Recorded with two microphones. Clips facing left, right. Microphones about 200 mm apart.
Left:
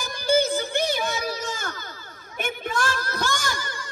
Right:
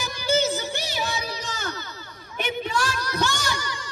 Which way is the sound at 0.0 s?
55° left (ahead or behind).